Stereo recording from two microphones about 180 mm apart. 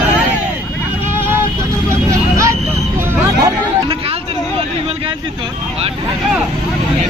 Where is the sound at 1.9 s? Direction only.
15° right (ahead or behind).